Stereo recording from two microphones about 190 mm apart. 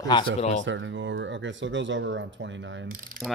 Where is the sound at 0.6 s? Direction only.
75° right (ahead or behind).